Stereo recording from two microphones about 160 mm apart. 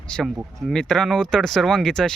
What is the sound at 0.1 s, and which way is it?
Speech, 5° left (ahead or behind).